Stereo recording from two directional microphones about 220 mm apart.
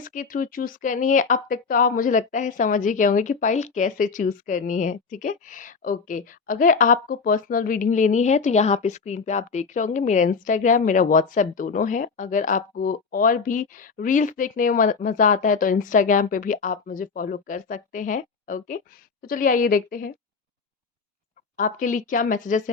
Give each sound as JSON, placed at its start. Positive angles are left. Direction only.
{"t": 0.0, "sound": "speech", "side_deg": 35}
{"t": 21.6, "sound": "speech", "side_deg": 35}